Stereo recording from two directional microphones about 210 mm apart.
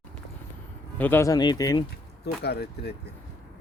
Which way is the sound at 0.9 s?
10° left (ahead or behind).